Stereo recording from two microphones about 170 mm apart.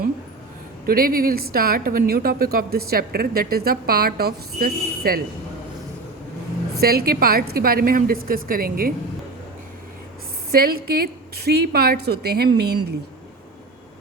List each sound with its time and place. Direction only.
0.9 s a woman's voice: 60° right (ahead or behind)
6.7 s a woman's voice: 65° right (ahead or behind)
10.5 s a woman's voice: 60° right (ahead or behind)